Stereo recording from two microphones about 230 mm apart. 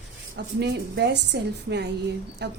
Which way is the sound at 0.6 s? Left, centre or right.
Right.